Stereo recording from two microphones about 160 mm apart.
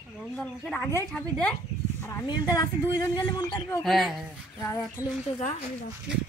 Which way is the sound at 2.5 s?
25° left (ahead or behind).